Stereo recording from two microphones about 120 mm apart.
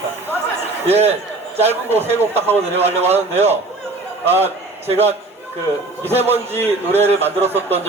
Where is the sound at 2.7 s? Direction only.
60° right (ahead or behind).